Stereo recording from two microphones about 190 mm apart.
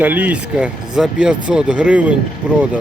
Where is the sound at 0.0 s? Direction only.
10° right (ahead or behind).